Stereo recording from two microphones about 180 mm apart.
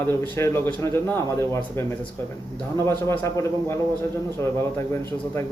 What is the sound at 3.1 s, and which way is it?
Speech, 15° left (ahead or behind).